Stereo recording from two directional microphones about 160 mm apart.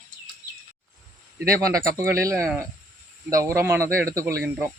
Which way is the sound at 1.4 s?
20° right (ahead or behind).